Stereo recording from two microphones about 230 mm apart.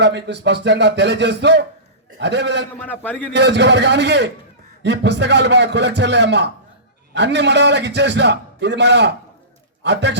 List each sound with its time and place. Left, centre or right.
0.0 s a man's voice: right
2.7 s a man's voice: centre
3.3 s a man's voice: right